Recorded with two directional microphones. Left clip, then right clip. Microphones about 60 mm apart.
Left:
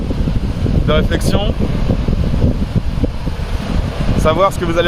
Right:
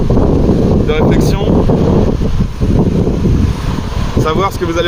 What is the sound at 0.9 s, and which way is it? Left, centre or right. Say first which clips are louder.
Speech: left 1 dB; left.